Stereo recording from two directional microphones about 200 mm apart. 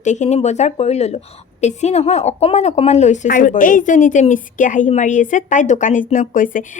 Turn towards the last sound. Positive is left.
turn(degrees=40)  # may be behind; listen again after turning